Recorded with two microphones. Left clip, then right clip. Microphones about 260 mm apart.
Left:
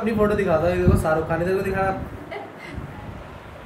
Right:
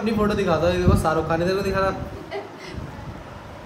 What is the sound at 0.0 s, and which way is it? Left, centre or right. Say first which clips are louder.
Speech: left 2 dB; centre.